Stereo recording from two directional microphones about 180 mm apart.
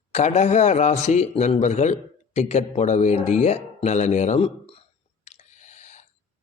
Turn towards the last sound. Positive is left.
turn(degrees=40)  # may be behind; listen again after turning